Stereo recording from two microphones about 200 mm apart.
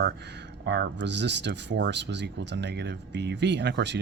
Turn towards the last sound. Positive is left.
turn(degrees=-60)  # may be behind; listen again after turning